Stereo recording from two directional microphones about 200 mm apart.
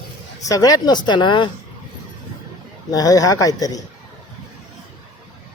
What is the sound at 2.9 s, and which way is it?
Speech, 20° left (ahead or behind).